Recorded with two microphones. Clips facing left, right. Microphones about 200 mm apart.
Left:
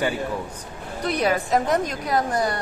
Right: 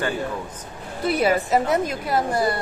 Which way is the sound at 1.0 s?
5° right (ahead or behind).